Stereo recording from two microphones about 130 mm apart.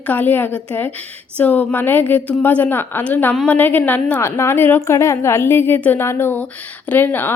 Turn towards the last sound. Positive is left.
turn(degrees=15)  # may be behind; listen again after turning